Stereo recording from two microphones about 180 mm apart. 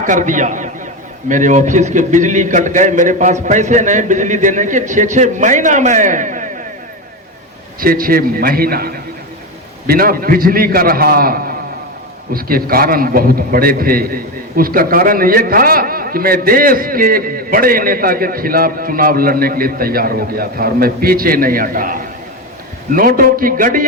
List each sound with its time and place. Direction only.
0.0 s a man's voice: 45° right (ahead or behind)
7.8 s a man's voice: 55° right (ahead or behind)